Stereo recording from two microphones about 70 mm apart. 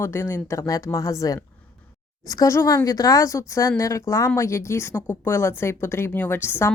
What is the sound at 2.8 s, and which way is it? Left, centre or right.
Speech, left.